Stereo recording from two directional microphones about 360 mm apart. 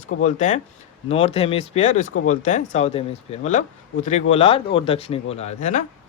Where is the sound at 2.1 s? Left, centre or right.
Left.